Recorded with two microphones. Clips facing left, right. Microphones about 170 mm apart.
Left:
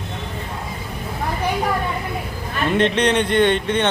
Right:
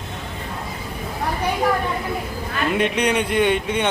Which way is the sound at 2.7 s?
10° right (ahead or behind).